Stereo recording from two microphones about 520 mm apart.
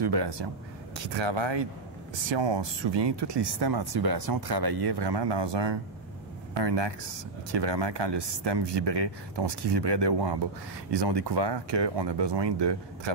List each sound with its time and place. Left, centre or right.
0.0 s speech: right